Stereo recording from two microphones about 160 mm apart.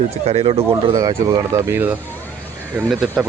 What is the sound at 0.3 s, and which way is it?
Speech, 40° right (ahead or behind).